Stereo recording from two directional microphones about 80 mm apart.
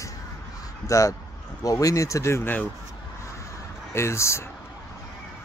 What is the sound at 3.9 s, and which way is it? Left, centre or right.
Speech, left.